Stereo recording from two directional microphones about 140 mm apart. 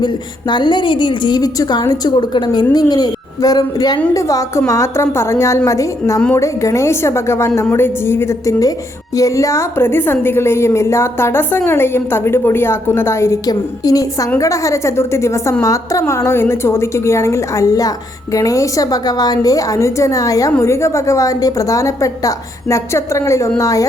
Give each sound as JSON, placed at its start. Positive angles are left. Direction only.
{"t": 0.0, "sound": "a woman's voice", "side_deg": 35}
{"t": 6.1, "sound": "a woman's voice", "side_deg": 10}
{"t": 6.4, "sound": "a woman's voice", "side_deg": 20}